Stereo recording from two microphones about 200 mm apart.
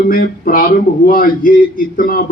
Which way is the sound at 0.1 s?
45° left (ahead or behind).